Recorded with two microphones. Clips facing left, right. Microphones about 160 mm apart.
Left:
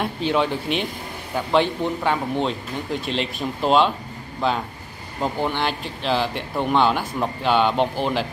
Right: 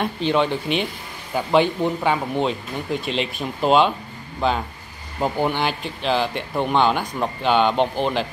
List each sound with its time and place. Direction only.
0.0 s speech: 5° left (ahead or behind)